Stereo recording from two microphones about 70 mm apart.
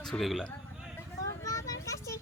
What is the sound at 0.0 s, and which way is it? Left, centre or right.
Speech, centre.